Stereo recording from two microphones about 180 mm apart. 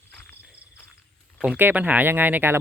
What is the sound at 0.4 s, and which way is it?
Cricket, 5° right (ahead or behind).